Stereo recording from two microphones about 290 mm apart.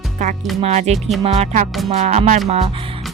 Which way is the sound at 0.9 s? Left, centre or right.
Centre.